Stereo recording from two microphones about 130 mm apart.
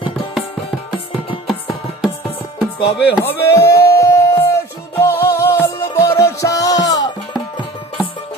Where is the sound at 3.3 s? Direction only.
20° left (ahead or behind).